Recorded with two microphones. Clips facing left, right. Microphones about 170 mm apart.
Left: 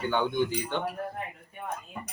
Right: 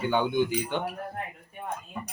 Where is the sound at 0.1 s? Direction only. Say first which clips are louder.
Right 2 dB; 15° right (ahead or behind).